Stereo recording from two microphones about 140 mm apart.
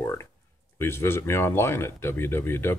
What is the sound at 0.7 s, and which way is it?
Speech, 20° left (ahead or behind).